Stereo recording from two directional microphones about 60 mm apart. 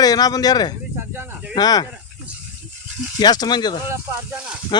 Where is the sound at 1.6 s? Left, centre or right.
Left.